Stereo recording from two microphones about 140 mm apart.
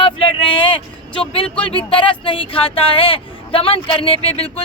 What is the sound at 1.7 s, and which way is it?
Speech, 40° left (ahead or behind).